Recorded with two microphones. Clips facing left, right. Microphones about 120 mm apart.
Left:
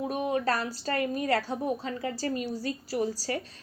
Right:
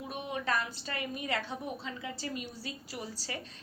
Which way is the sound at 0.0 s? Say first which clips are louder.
Left 9 dB; 40° left (ahead or behind).